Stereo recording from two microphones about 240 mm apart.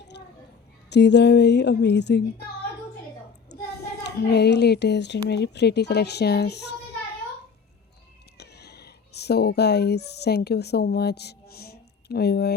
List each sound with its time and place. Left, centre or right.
0.1 s a sound: left
0.9 s a woman's voice: left
3.5 s a child's voice: left
8.4 s speech: left